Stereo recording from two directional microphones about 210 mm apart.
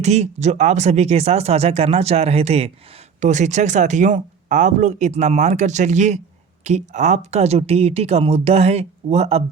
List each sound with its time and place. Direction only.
0.0 s speech: 30° right (ahead or behind)